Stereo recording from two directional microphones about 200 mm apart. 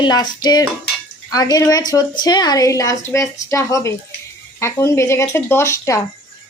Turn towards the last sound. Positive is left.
turn(degrees=15)  # may be behind; listen again after turning